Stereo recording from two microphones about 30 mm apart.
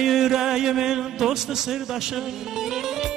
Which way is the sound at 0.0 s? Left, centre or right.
Centre.